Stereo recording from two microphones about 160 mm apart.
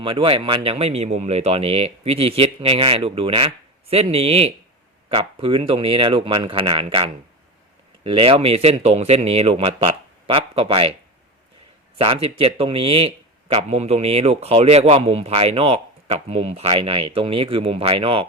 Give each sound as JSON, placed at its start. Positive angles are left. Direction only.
{"t": 0.0, "sound": "a man's voice", "side_deg": -35}
{"t": 11.9, "sound": "a man's voice", "side_deg": -35}